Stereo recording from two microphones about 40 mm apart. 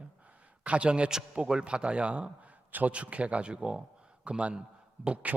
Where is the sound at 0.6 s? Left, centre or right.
Right.